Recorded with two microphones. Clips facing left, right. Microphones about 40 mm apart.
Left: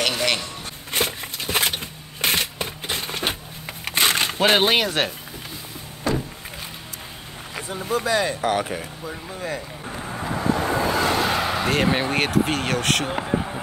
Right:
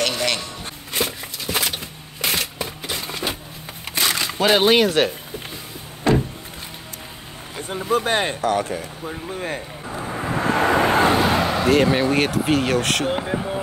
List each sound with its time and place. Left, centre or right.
0.0 s music: centre
0.9 s a sound: left
4.4 s speech: centre
4.6 s speech: centre
6.0 s a sound: right
7.6 s speech: right
8.4 s speech: centre
9.0 s speech: right
10.2 s vehicle: right
11.2 s speech: centre